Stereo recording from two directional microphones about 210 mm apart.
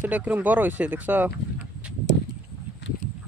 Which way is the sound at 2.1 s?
60° left (ahead or behind).